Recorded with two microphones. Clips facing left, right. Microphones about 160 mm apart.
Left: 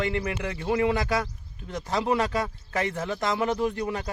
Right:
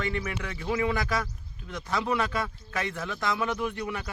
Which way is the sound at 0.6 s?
30° left (ahead or behind).